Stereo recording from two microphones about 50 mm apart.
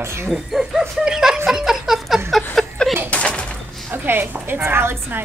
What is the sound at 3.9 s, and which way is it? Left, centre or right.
A woman's voice, right.